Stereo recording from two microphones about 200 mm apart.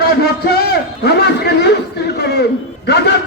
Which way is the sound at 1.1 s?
55° left (ahead or behind).